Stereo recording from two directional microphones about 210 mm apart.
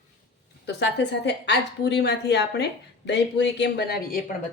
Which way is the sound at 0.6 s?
55° left (ahead or behind).